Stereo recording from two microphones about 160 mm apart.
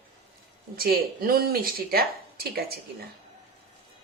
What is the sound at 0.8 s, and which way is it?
Speech, 65° right (ahead or behind).